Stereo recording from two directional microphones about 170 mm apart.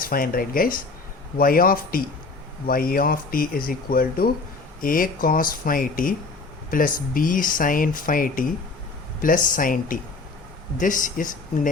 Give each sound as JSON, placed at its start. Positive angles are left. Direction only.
{"t": 0.0, "sound": "speech", "side_deg": 60}